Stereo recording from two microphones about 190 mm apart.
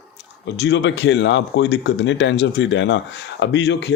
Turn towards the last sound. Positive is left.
turn(degrees=65)  # may be behind; listen again after turning